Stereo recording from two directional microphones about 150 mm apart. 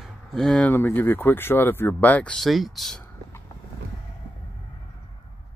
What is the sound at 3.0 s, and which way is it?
Vehicle, 15° left (ahead or behind).